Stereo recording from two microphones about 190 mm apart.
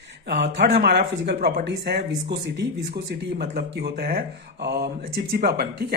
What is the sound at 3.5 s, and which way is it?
Speech, 55° right (ahead or behind).